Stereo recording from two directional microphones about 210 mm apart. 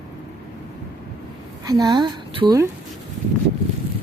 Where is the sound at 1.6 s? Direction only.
20° right (ahead or behind).